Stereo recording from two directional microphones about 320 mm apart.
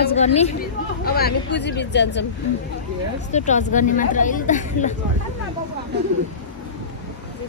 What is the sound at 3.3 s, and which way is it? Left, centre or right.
Speech, left.